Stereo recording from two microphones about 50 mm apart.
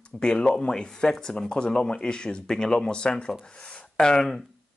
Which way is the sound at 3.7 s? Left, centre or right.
Centre.